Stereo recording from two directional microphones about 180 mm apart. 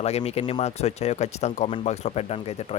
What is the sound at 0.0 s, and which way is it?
Speech, 35° left (ahead or behind).